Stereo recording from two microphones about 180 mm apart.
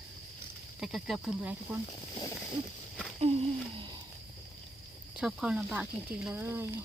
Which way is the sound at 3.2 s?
35° right (ahead or behind).